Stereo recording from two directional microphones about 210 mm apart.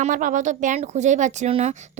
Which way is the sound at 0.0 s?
40° right (ahead or behind).